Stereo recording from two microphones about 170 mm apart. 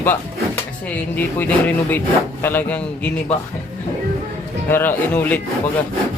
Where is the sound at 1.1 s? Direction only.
10° left (ahead or behind).